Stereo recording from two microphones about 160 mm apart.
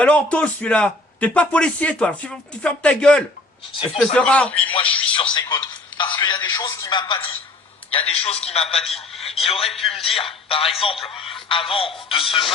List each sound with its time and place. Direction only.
0.0 s a man's voice: 5° left (ahead or behind)
5.1 s speech: 30° left (ahead or behind)
8.8 s a man's voice: centre (ahead or behind)
9.2 s speech: 40° left (ahead or behind)